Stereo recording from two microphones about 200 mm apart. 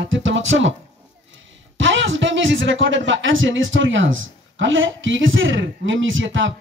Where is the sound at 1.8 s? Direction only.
70° right (ahead or behind).